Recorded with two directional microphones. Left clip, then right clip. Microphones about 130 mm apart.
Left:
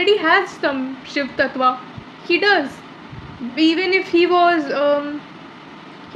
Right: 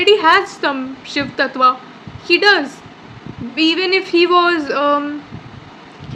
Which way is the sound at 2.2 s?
35° right (ahead or behind).